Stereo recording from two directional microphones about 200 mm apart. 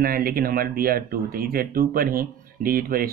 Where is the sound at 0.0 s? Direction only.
45° right (ahead or behind).